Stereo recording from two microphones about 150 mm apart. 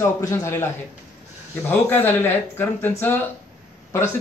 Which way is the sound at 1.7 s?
15° left (ahead or behind).